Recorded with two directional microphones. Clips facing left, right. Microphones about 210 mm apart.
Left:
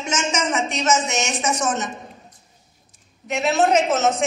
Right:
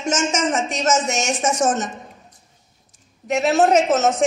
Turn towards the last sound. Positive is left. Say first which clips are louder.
# right 2 dB
turn(degrees=-45)  # may be behind; listen again after turning